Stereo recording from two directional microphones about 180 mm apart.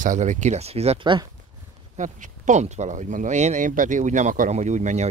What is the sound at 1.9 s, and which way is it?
Speech, 45° right (ahead or behind).